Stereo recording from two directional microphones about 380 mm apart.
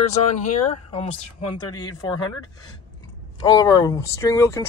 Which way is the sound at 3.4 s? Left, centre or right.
Centre.